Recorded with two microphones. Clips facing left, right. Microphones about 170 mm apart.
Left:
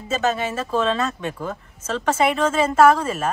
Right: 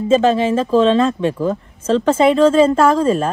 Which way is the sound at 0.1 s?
30° right (ahead or behind).